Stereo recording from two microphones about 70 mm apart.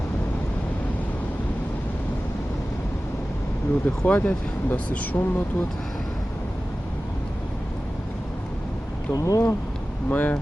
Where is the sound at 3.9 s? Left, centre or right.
Left.